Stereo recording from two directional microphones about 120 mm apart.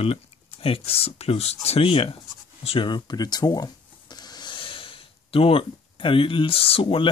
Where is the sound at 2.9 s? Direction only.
35° left (ahead or behind).